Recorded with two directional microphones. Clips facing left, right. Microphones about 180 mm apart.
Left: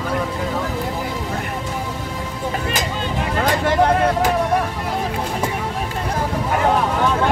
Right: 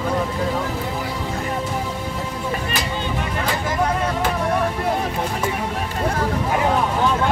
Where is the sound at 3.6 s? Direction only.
65° left (ahead or behind).